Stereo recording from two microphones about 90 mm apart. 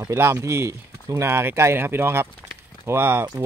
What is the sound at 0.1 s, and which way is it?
Speech, 30° right (ahead or behind).